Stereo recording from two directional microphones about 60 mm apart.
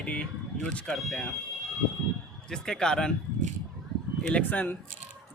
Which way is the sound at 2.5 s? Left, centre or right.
Centre.